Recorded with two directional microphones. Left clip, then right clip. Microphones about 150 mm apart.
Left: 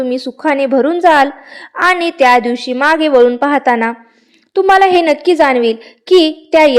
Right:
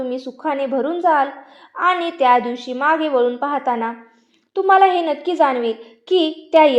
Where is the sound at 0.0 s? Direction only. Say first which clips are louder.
Left 8 dB; 45° left (ahead or behind).